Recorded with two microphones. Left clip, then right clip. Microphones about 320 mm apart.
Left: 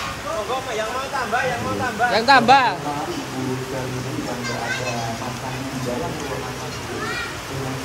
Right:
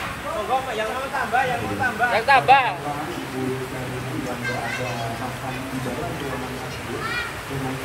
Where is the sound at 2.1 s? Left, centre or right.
Left.